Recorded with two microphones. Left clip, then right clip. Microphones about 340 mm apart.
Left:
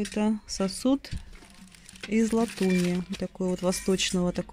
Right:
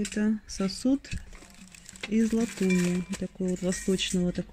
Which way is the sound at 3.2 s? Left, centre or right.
Left.